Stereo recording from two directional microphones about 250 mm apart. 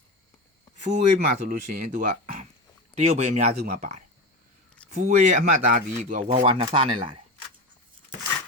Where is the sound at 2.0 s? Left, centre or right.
Right.